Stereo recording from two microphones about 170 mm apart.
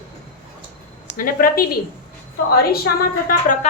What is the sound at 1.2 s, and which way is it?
Speech, 60° left (ahead or behind).